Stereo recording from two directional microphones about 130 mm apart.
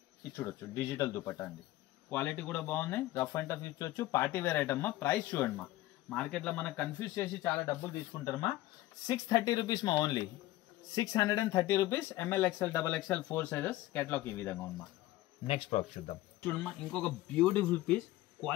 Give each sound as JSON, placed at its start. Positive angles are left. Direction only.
{"t": 0.4, "sound": "speech", "side_deg": 25}
{"t": 2.0, "sound": "speech", "side_deg": 15}
{"t": 7.0, "sound": "speech", "side_deg": 25}
{"t": 15.4, "sound": "a man's voice", "side_deg": 45}
{"t": 16.4, "sound": "speech", "side_deg": 10}